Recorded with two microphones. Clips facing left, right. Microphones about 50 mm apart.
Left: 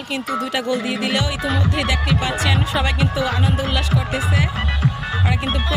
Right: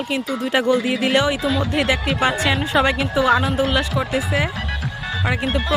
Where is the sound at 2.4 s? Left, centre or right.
Centre.